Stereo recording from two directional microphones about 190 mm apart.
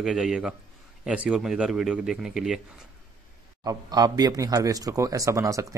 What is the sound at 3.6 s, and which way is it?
Speech, 20° right (ahead or behind).